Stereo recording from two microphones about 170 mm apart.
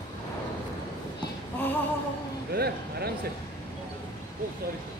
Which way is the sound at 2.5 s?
65° right (ahead or behind).